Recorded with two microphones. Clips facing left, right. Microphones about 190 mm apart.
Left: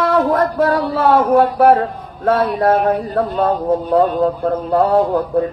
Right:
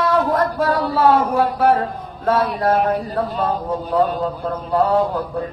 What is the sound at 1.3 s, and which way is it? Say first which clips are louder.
A man's voice: left 5 dB; 50° left (ahead or behind).